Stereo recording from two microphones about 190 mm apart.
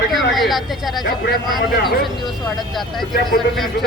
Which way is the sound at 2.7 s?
Centre (ahead or behind).